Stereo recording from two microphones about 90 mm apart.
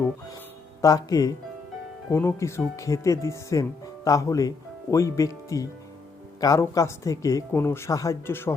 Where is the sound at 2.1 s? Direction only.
30° left (ahead or behind).